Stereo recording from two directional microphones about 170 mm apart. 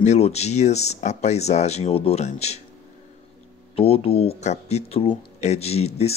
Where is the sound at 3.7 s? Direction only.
35° left (ahead or behind).